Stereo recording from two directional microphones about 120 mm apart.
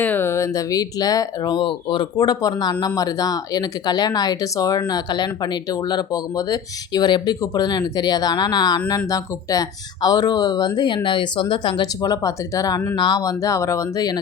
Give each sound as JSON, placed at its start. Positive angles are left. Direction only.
{"t": 0.0, "sound": "speech", "side_deg": 15}